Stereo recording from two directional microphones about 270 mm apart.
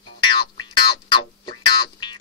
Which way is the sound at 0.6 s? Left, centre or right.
Centre.